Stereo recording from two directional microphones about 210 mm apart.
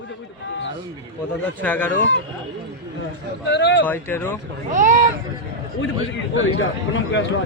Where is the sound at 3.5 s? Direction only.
60° left (ahead or behind).